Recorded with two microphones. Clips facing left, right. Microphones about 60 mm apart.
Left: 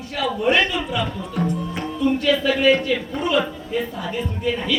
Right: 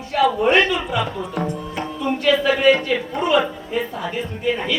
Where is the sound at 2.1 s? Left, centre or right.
Right.